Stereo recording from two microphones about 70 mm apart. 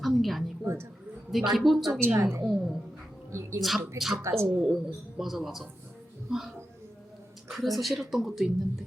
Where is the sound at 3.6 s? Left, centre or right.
Centre.